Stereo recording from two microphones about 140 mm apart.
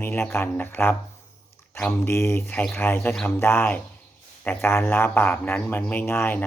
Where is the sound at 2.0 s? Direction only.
15° left (ahead or behind).